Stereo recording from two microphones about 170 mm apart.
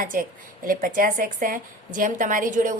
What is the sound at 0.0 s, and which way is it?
Speech, 55° right (ahead or behind).